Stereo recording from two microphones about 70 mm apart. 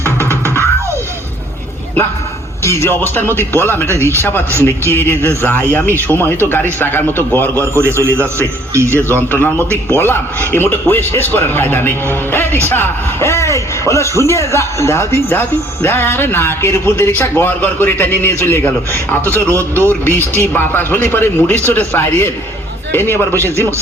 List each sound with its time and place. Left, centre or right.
2.6 s speech: left
3.9 s a man's voice: right
4.2 s speech: left
8.7 s a man's voice: right
9.3 s a man's voice: left
15.3 s speech: left
19.5 s a man's voice: right
19.9 s speech: left